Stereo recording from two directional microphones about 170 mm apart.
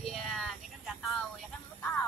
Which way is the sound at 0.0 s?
Centre (ahead or behind).